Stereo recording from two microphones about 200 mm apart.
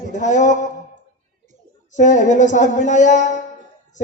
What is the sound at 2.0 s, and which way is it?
A man's voice, 40° left (ahead or behind).